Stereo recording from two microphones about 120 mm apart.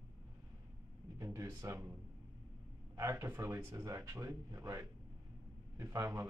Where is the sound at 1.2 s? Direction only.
25° right (ahead or behind).